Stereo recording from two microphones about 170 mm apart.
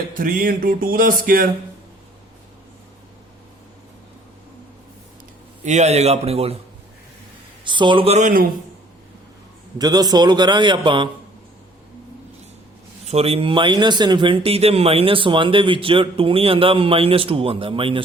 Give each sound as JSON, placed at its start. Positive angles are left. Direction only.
{"t": 0.1, "sound": "music", "side_deg": -55}
{"t": 5.6, "sound": "speech", "side_deg": -40}
{"t": 7.6, "sound": "a man's voice", "side_deg": -30}
{"t": 9.7, "sound": "a man's voice", "side_deg": -25}
{"t": 13.1, "sound": "speech", "side_deg": -35}